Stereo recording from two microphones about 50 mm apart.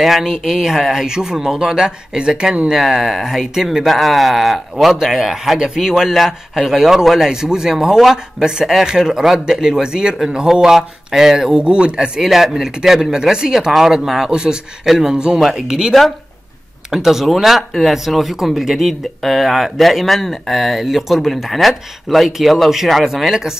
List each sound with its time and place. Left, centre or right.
0.0 s speech: centre
2.7 s speech: centre
12.2 s speech: centre
16.9 s speech: centre